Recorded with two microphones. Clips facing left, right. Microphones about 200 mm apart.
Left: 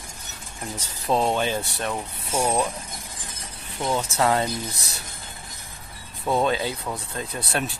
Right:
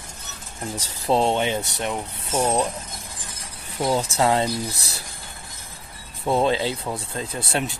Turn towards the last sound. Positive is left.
turn(degrees=-25)  # may be behind; listen again after turning